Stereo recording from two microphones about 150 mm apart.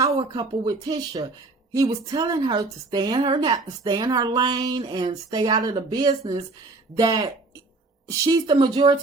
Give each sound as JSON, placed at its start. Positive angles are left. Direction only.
{"t": 0.0, "sound": "speech", "side_deg": -30}